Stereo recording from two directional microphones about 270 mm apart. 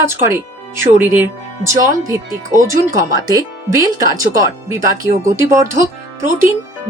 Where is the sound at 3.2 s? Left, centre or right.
Centre.